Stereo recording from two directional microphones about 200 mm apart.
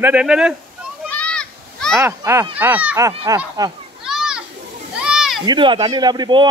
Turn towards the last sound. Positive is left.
turn(degrees=-20)  # may be behind; listen again after turning